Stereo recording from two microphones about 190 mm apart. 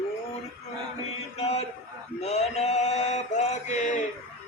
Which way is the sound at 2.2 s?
35° left (ahead or behind).